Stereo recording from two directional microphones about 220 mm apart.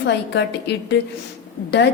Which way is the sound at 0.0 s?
50° left (ahead or behind).